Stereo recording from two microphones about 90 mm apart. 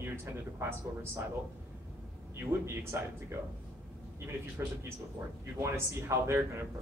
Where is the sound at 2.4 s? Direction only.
30° right (ahead or behind).